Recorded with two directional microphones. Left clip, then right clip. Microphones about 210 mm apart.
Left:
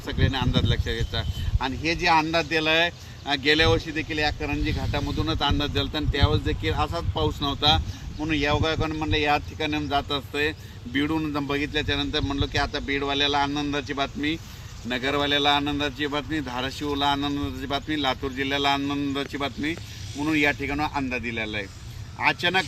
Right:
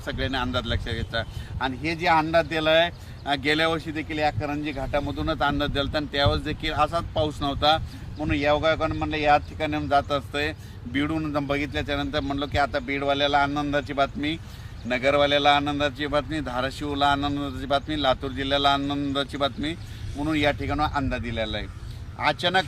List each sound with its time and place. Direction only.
0.0 s speech: 15° right (ahead or behind)